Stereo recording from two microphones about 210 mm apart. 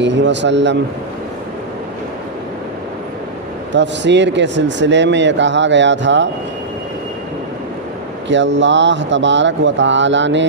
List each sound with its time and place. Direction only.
0.0 s speech: 60° right (ahead or behind)
3.7 s speech: 55° right (ahead or behind)
8.3 s speech: 60° right (ahead or behind)